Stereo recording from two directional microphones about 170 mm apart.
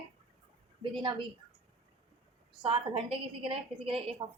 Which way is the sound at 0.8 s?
30° right (ahead or behind).